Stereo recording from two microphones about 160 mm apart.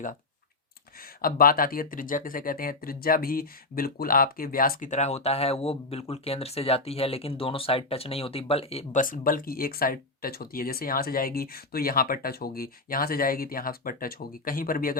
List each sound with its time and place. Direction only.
1.2 s speech: 65° left (ahead or behind)
4.9 s speech: 45° left (ahead or behind)
9.0 s speech: 60° left (ahead or behind)